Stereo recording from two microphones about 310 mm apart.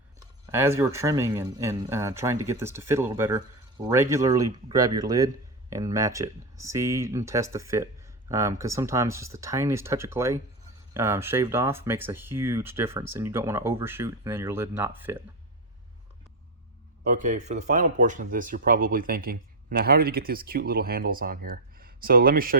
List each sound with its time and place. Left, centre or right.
0.5 s speech: centre
17.0 s speech: right